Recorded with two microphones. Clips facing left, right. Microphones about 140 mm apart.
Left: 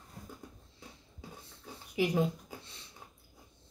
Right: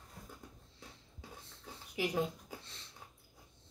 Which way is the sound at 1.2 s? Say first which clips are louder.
Left 3 dB; 5° left (ahead or behind).